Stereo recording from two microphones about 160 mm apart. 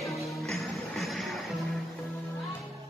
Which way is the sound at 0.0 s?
Centre (ahead or behind).